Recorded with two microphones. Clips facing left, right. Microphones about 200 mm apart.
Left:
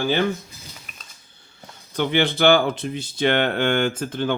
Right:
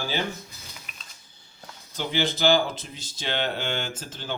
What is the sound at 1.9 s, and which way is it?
Speech, 60° left (ahead or behind).